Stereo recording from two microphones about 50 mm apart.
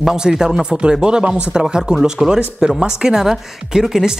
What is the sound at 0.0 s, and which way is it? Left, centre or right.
Speech, centre.